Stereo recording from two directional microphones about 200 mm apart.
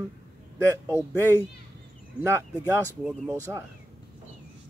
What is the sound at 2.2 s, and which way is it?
Speech, 15° right (ahead or behind).